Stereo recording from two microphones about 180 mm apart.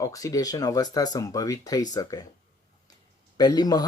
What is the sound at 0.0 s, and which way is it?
Speech, 20° left (ahead or behind).